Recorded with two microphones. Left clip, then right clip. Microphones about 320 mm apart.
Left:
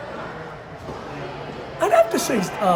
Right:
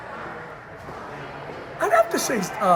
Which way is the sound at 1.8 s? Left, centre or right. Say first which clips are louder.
Left 2 dB; centre.